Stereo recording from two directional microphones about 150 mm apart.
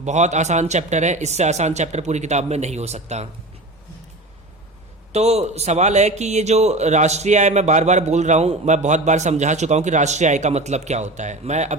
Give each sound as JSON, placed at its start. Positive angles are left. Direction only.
{"t": 0.0, "sound": "speech", "side_deg": -50}
{"t": 5.1, "sound": "speech", "side_deg": -45}